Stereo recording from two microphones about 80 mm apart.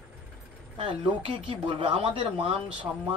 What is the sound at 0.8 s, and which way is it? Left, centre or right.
Speech, right.